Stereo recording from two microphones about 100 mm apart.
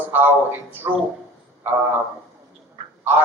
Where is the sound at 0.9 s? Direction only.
40° right (ahead or behind).